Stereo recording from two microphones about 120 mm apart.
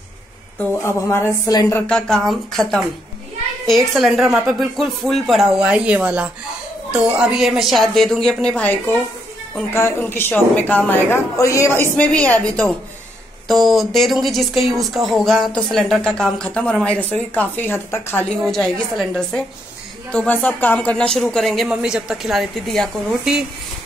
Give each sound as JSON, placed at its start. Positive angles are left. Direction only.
{"t": 0.6, "sound": "a woman's voice", "side_deg": 20}
{"t": 1.7, "sound": "a woman's voice", "side_deg": 10}
{"t": 11.3, "sound": "speech", "side_deg": 25}
{"t": 13.5, "sound": "speech", "side_deg": 0}
{"t": 18.3, "sound": "speech", "side_deg": 5}